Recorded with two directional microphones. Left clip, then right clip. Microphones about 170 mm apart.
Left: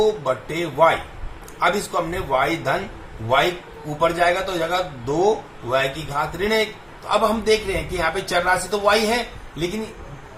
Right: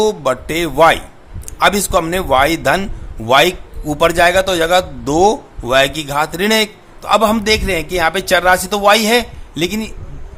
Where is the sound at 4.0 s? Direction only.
65° right (ahead or behind).